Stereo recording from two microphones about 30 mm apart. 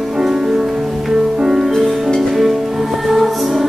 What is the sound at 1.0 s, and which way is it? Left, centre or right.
Music, centre.